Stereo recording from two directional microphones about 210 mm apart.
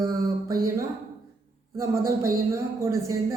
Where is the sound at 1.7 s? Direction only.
15° right (ahead or behind).